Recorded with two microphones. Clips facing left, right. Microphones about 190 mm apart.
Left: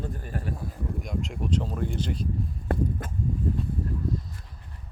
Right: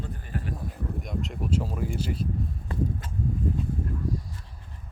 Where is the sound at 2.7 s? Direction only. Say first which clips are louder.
Left 3 dB; 60° left (ahead or behind).